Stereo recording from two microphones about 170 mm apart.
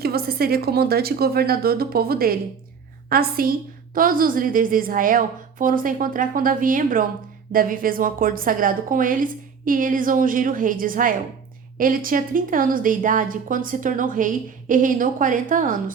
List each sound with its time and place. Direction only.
0.0 s a woman's voice: 65° right (ahead or behind)